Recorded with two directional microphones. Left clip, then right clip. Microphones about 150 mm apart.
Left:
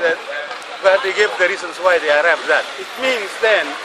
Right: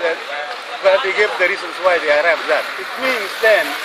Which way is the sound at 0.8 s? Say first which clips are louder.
Even; centre (ahead or behind).